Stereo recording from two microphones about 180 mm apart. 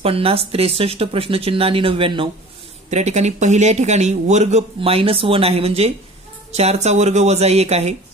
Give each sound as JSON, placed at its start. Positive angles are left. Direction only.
{"t": 0.0, "sound": "a man's voice", "side_deg": -30}